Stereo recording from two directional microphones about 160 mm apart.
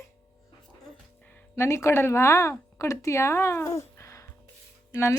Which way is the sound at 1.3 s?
15° left (ahead or behind).